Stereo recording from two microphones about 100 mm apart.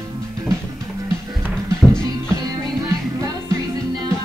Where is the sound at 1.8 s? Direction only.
5° left (ahead or behind).